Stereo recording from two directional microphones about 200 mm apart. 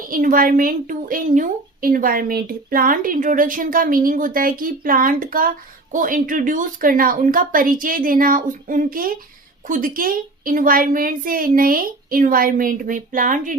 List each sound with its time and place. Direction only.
0.1 s a woman's voice: 45° right (ahead or behind)